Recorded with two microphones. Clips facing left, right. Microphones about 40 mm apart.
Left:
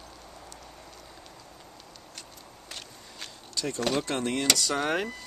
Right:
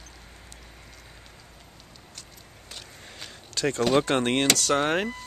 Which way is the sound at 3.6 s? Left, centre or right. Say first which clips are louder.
Right 6 dB; right.